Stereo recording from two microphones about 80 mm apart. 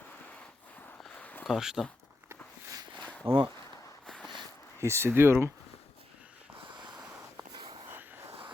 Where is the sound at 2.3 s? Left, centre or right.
Right.